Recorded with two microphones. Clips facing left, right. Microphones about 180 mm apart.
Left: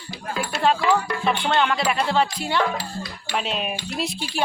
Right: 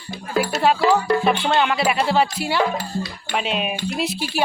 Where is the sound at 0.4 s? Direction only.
5° right (ahead or behind).